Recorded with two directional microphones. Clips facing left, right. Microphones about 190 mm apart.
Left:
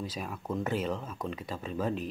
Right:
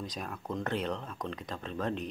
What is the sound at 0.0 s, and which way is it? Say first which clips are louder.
Speech: left 2 dB; 5° left (ahead or behind).